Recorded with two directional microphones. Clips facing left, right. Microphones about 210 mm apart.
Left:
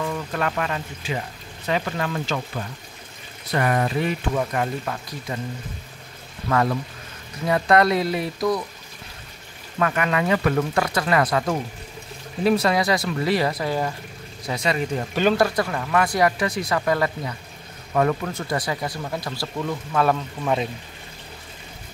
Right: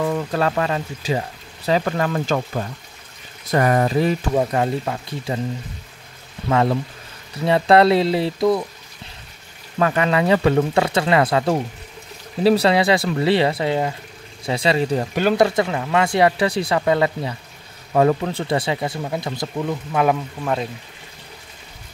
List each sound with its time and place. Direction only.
0.0 s speech: 35° right (ahead or behind)
1.9 s speech: 50° right (ahead or behind); by 5.4 s 25° right (ahead or behind)
6.5 s speech: 25° right (ahead or behind)
9.8 s speech: 30° right (ahead or behind); by 20.2 s 15° right (ahead or behind)